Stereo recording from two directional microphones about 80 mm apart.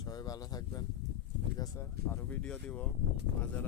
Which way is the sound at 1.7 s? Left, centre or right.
Left.